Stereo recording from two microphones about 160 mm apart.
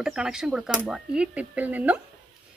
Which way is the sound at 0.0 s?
5° right (ahead or behind).